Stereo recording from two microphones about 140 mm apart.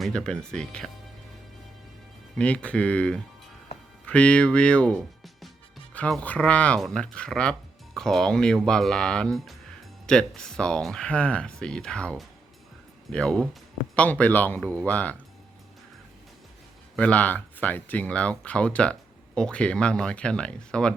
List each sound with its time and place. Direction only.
0.0 s speech: centre (ahead or behind)
2.3 s speech: 10° left (ahead or behind)
17.0 s speech: 10° left (ahead or behind)